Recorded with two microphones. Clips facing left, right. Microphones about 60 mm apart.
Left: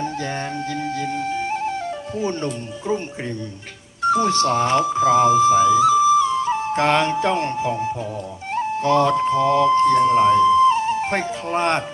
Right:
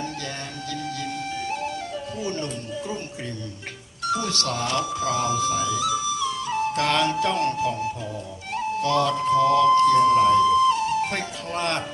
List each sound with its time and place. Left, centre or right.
2.2 s speech: left
4.0 s speech: left